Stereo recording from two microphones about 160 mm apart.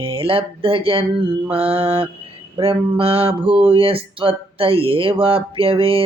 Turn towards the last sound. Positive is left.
turn(degrees=-35)  # may be behind; listen again after turning